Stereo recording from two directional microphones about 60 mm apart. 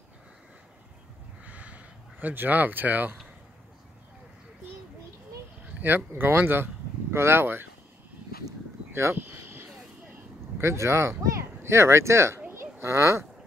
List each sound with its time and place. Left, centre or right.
1.4 s a sound: right
5.8 s speech: right
10.6 s speech: right